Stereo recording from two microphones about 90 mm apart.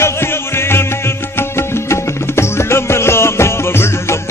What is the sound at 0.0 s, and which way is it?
Music, 30° left (ahead or behind).